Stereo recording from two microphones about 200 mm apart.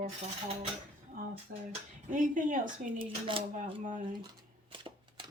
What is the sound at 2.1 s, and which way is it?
Speech, 40° right (ahead or behind).